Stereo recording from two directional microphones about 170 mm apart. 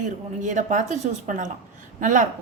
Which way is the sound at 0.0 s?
45° right (ahead or behind).